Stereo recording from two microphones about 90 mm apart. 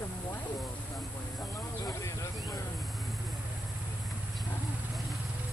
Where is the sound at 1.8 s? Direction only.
40° left (ahead or behind).